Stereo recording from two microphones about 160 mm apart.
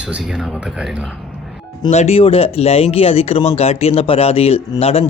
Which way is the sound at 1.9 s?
40° left (ahead or behind).